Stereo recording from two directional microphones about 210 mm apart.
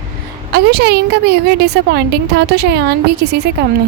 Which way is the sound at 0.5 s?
50° right (ahead or behind).